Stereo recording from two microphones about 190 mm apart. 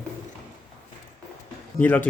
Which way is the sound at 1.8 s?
10° left (ahead or behind).